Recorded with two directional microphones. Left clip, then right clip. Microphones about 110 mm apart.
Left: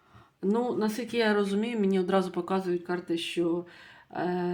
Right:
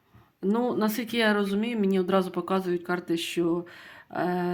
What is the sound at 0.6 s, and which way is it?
Speech, 30° right (ahead or behind).